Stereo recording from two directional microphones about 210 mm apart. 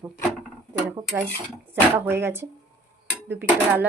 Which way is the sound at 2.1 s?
10° right (ahead or behind).